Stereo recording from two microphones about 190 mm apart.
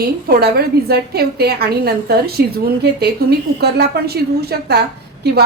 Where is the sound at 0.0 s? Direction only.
55° right (ahead or behind).